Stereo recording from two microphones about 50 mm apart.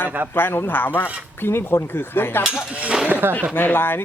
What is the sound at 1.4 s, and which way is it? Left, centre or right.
Speech, left.